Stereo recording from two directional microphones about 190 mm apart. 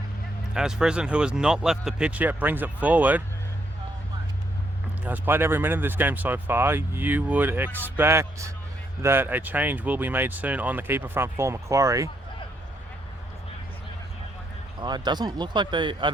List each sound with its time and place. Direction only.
0.5 s speech: 5° right (ahead or behind)
5.0 s speech: 10° right (ahead or behind)
14.8 s speech: 20° right (ahead or behind)